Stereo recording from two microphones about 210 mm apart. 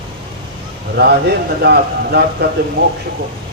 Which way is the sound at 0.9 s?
50° right (ahead or behind).